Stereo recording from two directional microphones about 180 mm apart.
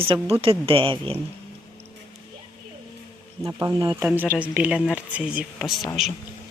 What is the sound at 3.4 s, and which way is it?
Speech, 20° right (ahead or behind).